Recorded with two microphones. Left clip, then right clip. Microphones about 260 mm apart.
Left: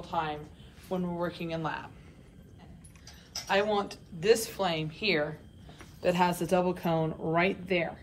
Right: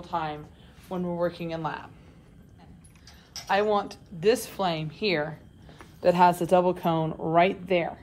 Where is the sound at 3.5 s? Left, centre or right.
Centre.